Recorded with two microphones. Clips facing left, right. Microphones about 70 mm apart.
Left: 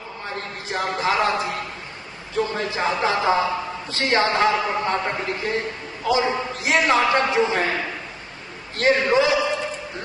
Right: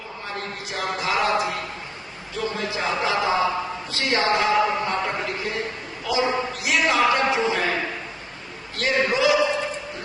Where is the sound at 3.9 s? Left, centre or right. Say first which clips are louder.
Left 3 dB; left.